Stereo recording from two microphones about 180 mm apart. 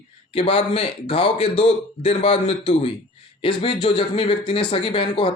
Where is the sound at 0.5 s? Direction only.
30° left (ahead or behind).